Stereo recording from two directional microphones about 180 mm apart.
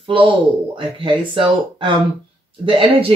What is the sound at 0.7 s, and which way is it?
Speech, 30° right (ahead or behind).